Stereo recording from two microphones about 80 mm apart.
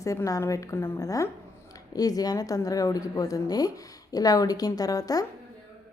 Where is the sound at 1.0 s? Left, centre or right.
Left.